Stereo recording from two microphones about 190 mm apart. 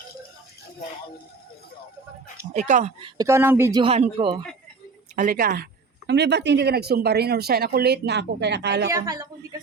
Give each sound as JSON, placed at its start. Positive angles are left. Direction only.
{"t": 2.5, "sound": "speech", "side_deg": -40}
{"t": 3.0, "sound": "speech", "side_deg": -15}
{"t": 3.8, "sound": "speech", "side_deg": -30}
{"t": 5.1, "sound": "speech", "side_deg": -45}
{"t": 6.1, "sound": "speech", "side_deg": -65}
{"t": 8.9, "sound": "speech", "side_deg": -20}